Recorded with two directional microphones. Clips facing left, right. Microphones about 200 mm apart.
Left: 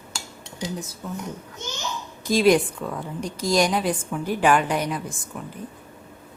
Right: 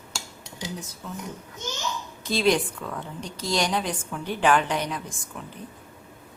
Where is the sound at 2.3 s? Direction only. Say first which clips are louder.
Left 5 dB; 10° left (ahead or behind).